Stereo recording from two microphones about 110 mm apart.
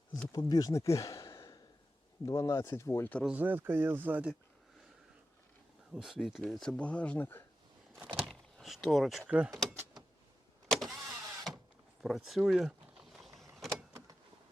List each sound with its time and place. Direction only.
0.3 s speech: 35° left (ahead or behind)
3.2 s speech: 15° right (ahead or behind)
5.9 s speech: centre (ahead or behind); by 7.4 s 15° left (ahead or behind)
7.9 s power windows: 5° right (ahead or behind)
9.2 s speech: 10° right (ahead or behind)
10.7 s car: centre (ahead or behind)
12.0 s power windows: centre (ahead or behind)